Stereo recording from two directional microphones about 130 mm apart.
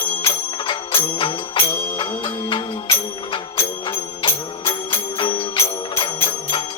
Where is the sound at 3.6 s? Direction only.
20° left (ahead or behind).